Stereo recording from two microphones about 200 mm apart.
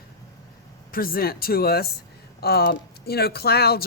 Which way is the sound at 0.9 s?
45° left (ahead or behind).